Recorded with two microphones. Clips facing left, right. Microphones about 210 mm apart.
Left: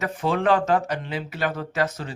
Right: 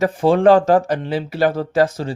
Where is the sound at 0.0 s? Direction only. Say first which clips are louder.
Right 10 dB; 30° right (ahead or behind).